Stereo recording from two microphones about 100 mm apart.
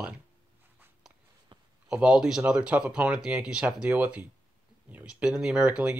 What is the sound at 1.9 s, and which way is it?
Speech, 10° right (ahead or behind).